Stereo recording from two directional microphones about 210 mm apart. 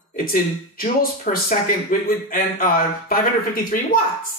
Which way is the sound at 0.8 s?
40° left (ahead or behind).